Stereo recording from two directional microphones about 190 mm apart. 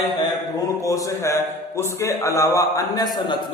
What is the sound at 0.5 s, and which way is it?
A man's voice, 15° left (ahead or behind).